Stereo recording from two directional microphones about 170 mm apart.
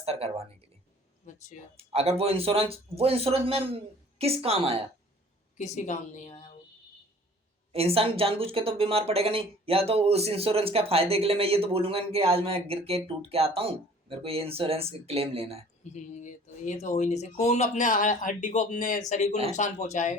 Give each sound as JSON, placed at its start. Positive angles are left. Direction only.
{"t": 0.0, "sound": "speech", "side_deg": -35}
{"t": 1.2, "sound": "speech", "side_deg": 50}
{"t": 1.7, "sound": "speech", "side_deg": -35}
{"t": 5.5, "sound": "speech", "side_deg": 45}
{"t": 7.7, "sound": "speech", "side_deg": -35}
{"t": 15.8, "sound": "speech", "side_deg": 45}